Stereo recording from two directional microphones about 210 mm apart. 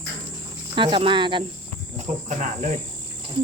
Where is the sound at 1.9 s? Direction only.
35° right (ahead or behind).